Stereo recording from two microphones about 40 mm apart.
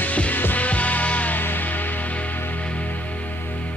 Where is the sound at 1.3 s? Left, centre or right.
Left.